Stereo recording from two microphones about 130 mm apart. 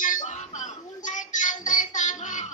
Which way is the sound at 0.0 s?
80° left.